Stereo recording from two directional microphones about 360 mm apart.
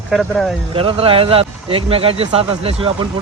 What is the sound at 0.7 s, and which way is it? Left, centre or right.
Speech, centre.